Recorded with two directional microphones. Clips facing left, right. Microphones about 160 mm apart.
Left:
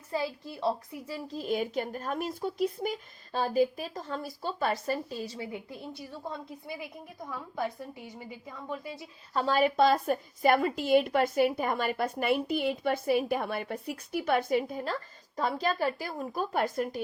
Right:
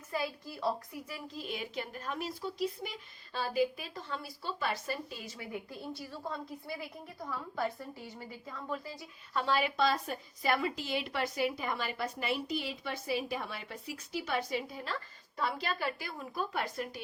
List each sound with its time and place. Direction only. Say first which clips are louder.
0.1 s a woman's voice: left 4 dB; 25° left (ahead or behind)
1.5 s a woman's voice: left 10 dB; 45° left (ahead or behind); by 9.0 s 20° left (ahead or behind)
9.3 s a woman's voice: left 5 dB; 40° left (ahead or behind)